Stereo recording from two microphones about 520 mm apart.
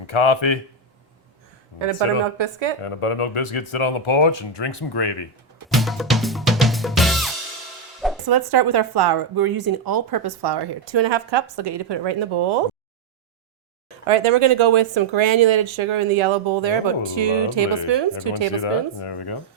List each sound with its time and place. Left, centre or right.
0.1 s speech: left
1.8 s speech: right
2.8 s speech: left
5.6 s music: centre
8.3 s speech: right
14.1 s speech: right
18.6 s speech: left